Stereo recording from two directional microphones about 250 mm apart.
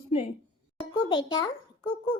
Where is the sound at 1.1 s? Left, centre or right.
Centre.